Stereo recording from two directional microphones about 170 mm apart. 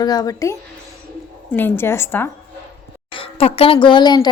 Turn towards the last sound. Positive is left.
turn(degrees=25)  # may be behind; listen again after turning